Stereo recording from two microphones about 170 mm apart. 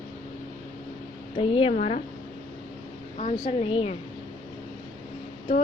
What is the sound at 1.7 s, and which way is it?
Speech, 45° left (ahead or behind).